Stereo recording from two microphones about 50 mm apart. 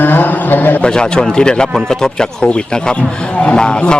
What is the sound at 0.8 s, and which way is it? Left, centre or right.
A man's voice, centre.